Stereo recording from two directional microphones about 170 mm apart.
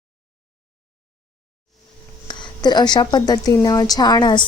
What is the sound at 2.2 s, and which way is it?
A woman's voice, 25° left (ahead or behind).